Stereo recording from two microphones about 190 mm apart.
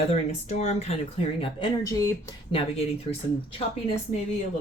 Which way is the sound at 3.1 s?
30° left (ahead or behind).